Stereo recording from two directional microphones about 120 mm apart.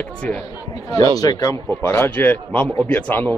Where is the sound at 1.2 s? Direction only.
30° left (ahead or behind).